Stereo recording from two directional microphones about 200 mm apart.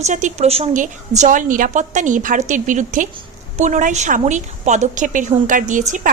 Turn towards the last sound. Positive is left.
turn(degrees=-40)  # may be behind; listen again after turning